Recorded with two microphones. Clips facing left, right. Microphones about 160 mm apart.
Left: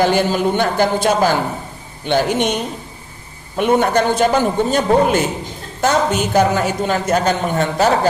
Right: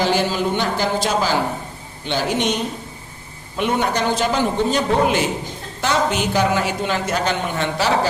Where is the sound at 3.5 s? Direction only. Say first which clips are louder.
Left 6 dB; 50° left (ahead or behind).